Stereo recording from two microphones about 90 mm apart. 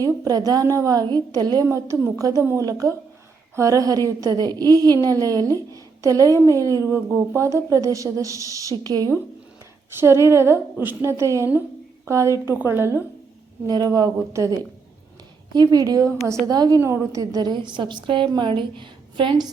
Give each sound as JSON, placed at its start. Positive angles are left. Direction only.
{"t": 0.3, "sound": "speech", "side_deg": -45}
{"t": 1.7, "sound": "a woman's voice", "side_deg": -35}
{"t": 6.8, "sound": "speech", "side_deg": -25}
{"t": 10.0, "sound": "a woman's voice", "side_deg": -30}
{"t": 13.7, "sound": "speech", "side_deg": -50}
{"t": 15.5, "sound": "speech", "side_deg": -45}
{"t": 16.5, "sound": "speech", "side_deg": -45}
{"t": 16.8, "sound": "a woman's voice", "side_deg": -30}